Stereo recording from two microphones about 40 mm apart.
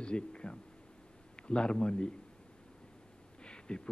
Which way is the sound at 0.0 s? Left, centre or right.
Left.